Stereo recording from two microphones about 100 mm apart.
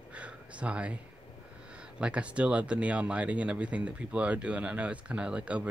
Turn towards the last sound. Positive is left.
turn(degrees=-10)  # may be behind; listen again after turning